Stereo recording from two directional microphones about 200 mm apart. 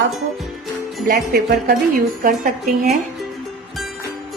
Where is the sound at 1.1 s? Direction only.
50° right (ahead or behind).